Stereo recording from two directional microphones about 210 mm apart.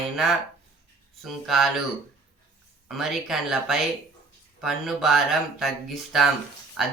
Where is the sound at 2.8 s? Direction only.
Centre (ahead or behind).